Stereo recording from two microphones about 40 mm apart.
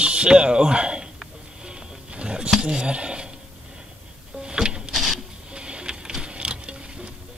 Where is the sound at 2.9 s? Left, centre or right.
Right.